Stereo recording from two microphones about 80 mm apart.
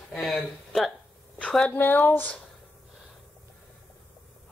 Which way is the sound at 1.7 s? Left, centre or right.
Left.